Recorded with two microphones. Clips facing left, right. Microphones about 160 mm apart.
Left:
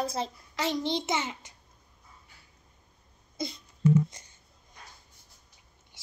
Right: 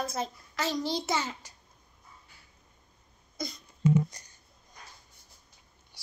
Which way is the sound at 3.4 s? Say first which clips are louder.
Left 1 dB; 25° left (ahead or behind).